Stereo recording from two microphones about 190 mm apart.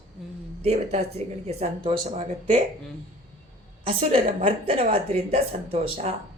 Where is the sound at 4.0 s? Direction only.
30° right (ahead or behind).